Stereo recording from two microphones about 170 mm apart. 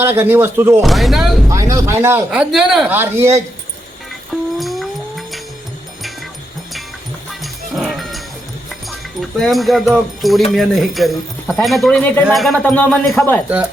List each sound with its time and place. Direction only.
0.0 s speech: 10° right (ahead or behind)
0.8 s speech: centre (ahead or behind)
1.5 s a sound: 20° right (ahead or behind)
2.3 s speech: 5° right (ahead or behind)
4.5 s music: centre (ahead or behind)
7.4 s music: centre (ahead or behind)
8.9 s speech: centre (ahead or behind)